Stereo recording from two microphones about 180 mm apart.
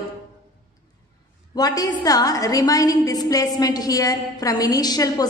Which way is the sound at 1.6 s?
20° left (ahead or behind).